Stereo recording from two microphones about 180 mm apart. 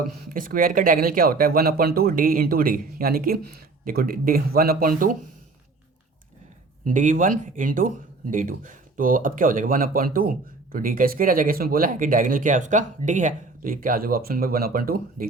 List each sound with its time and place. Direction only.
0.3 s speech: 50° right (ahead or behind)
6.8 s speech: 45° right (ahead or behind)